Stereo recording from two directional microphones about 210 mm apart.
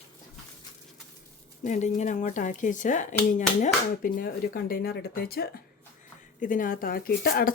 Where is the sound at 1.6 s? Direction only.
35° left (ahead or behind).